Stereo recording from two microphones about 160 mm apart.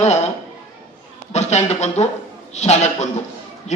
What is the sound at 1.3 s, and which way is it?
A man's voice, 45° left (ahead or behind).